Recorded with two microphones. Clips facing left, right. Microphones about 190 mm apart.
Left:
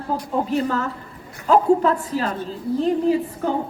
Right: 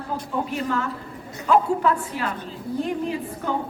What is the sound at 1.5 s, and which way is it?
Speech, 35° left (ahead or behind).